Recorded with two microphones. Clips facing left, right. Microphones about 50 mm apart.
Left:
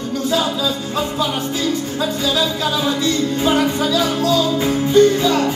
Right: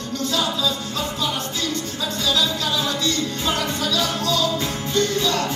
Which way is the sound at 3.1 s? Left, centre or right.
Centre.